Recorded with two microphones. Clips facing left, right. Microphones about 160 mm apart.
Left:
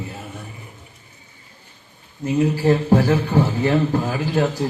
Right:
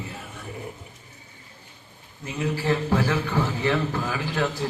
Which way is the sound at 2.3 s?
40° left (ahead or behind).